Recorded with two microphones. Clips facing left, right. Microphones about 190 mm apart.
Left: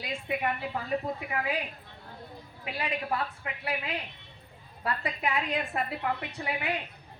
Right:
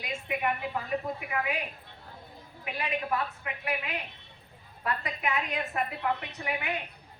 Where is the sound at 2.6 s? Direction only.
30° left (ahead or behind).